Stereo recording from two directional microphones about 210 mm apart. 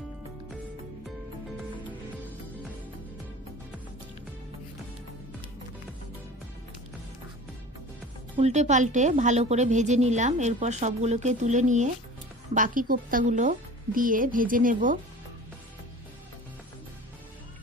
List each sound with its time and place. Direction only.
8.4 s a woman's voice: 30° right (ahead or behind)